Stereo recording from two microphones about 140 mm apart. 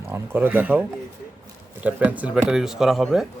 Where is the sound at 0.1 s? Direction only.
15° right (ahead or behind).